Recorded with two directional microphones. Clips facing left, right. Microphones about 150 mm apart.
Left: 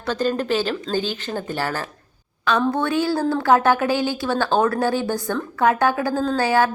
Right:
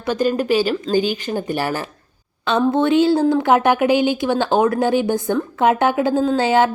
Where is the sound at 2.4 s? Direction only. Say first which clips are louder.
Right 4 dB; 25° right (ahead or behind).